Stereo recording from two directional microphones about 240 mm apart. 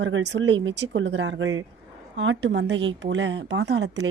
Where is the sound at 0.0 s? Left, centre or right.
Right.